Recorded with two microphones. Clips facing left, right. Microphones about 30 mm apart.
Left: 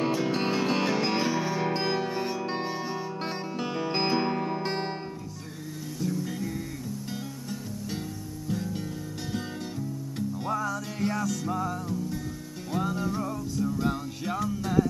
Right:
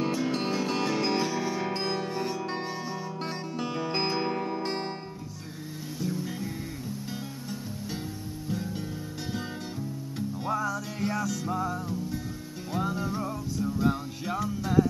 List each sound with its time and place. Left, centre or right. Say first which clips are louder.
0.0 s music: left 2 dB; centre
3.8 s music: left 3 dB; centre
5.9 s music: left 2 dB; centre
9.3 s music: left 1 dB; centre